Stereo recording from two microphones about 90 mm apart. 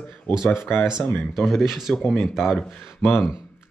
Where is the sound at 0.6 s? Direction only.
25° left (ahead or behind).